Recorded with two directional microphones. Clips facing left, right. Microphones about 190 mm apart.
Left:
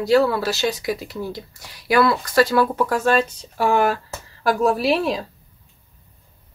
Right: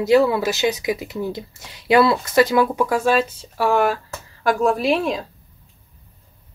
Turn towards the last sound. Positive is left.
turn(degrees=0)  # may be behind; listen again after turning